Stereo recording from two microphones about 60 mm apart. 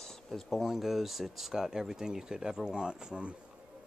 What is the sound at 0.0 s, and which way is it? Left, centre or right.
Speech, centre.